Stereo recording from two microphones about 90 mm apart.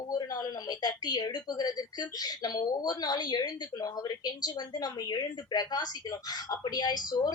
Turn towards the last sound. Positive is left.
turn(degrees=50)  # may be behind; listen again after turning